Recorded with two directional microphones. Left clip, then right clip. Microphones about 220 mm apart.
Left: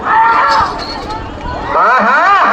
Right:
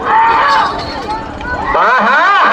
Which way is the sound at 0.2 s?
30° right (ahead or behind).